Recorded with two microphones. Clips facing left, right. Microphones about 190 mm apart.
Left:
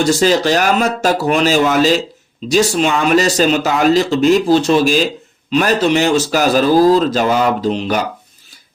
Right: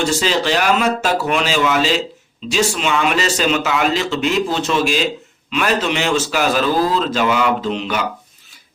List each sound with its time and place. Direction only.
0.0 s speech: 40° left (ahead or behind)